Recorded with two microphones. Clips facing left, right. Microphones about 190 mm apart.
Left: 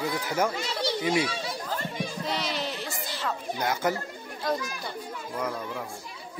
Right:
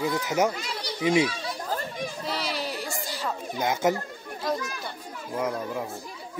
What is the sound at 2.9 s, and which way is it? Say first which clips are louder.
Music: right 2 dB; 40° right (ahead or behind).